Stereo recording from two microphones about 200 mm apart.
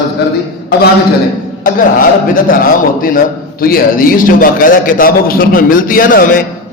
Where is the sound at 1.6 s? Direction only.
45° left (ahead or behind).